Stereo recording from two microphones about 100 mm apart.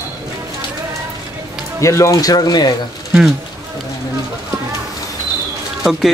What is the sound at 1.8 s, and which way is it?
Speech, 30° left (ahead or behind).